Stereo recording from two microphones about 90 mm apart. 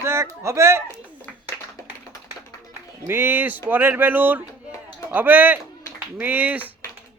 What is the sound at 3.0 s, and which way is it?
Speech, 25° right (ahead or behind).